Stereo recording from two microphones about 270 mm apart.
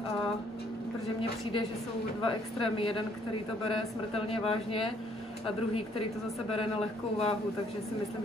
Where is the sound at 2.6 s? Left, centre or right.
Centre.